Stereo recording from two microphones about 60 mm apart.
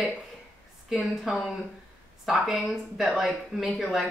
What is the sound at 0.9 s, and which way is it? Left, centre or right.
Speech, centre.